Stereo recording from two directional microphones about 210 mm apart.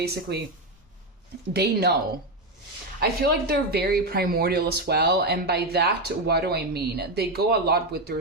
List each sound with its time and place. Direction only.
0.0 s speech: 50° right (ahead or behind)
1.5 s speech: 50° right (ahead or behind)
3.0 s speech: 45° right (ahead or behind)